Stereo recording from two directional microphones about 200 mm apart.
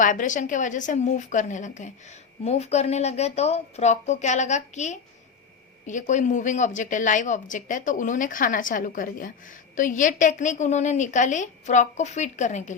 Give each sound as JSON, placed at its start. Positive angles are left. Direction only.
{"t": 0.0, "sound": "a woman's voice", "side_deg": 40}